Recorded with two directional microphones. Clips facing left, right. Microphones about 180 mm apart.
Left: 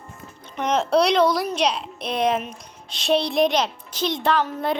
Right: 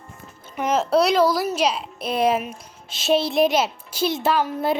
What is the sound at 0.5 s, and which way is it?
A woman's voice, 5° right (ahead or behind).